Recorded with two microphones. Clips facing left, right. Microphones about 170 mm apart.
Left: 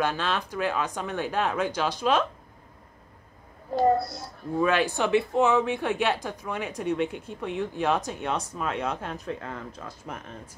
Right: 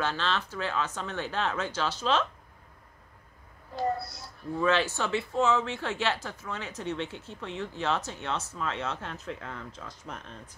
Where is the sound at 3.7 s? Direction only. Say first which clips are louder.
Left 8 dB; 45° left (ahead or behind).